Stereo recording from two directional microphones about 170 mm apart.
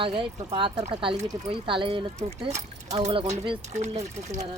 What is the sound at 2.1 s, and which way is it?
Speech, 40° right (ahead or behind).